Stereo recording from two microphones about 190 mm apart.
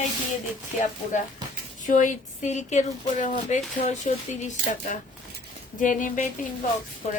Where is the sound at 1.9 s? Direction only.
40° left (ahead or behind).